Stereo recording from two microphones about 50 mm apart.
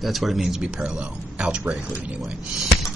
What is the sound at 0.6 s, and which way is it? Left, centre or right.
Speech, centre.